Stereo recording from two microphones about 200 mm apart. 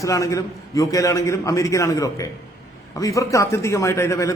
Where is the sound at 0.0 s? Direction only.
15° left (ahead or behind).